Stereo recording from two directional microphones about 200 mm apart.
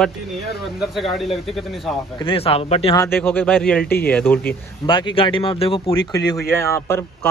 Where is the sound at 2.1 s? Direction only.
25° left (ahead or behind).